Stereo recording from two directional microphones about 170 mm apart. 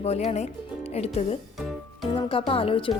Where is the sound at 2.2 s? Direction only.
30° left (ahead or behind).